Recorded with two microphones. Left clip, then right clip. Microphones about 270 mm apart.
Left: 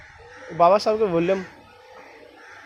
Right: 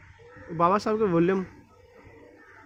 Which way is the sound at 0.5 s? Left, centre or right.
Centre.